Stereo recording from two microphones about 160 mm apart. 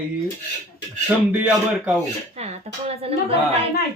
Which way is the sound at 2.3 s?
40° right (ahead or behind).